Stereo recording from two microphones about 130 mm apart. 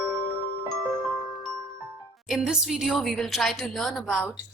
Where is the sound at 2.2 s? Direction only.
5° right (ahead or behind).